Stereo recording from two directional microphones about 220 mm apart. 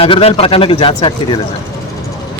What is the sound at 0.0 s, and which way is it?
Speech, 25° left (ahead or behind).